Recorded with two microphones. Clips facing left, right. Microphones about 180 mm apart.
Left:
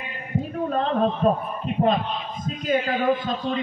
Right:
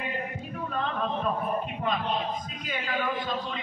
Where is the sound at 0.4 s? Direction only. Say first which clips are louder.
Left 8 dB; 35° left (ahead or behind).